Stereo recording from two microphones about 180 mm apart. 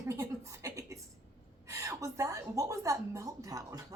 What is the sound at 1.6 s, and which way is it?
A woman's voice, 15° right (ahead or behind).